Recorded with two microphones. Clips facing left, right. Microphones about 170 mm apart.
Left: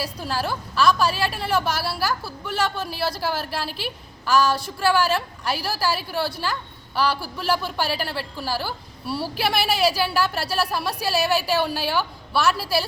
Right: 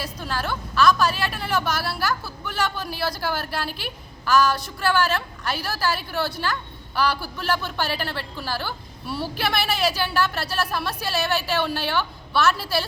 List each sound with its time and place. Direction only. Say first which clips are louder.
0.3 s a woman's voice: right 1 dB; 30° left (ahead or behind)
1.1 s a woman's voice: left 3 dB; 5° left (ahead or behind)
1.4 s a woman's voice: left 2 dB; 30° left (ahead or behind)
3.2 s a woman's voice: left 1 dB; centre (ahead or behind)
4.4 s a woman's voice: even; 30° left (ahead or behind)
4.8 s a woman's voice: left 2 dB; 5° left (ahead or behind)
9.5 s a woman's voice: left 3 dB; 35° left (ahead or behind)
10.0 s a woman's voice: left 1 dB; 5° left (ahead or behind)
11.4 s a woman's voice: left 2 dB; 35° left (ahead or behind)
11.7 s a woman's voice: left 1 dB; 5° left (ahead or behind)